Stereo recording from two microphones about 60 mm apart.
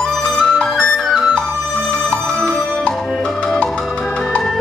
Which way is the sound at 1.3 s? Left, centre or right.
Centre.